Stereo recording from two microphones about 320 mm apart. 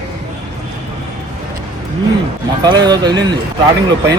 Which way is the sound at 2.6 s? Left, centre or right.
Centre.